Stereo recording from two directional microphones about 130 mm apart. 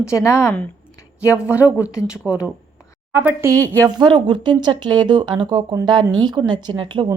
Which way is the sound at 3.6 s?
10° left (ahead or behind).